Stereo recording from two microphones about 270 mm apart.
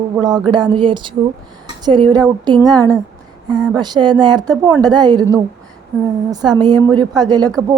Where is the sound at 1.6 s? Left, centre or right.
Centre.